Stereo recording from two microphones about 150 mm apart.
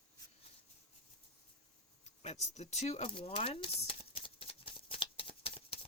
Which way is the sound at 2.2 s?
45° left (ahead or behind).